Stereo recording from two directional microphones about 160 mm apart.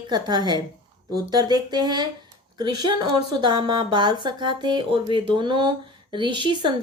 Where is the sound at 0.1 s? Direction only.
25° right (ahead or behind).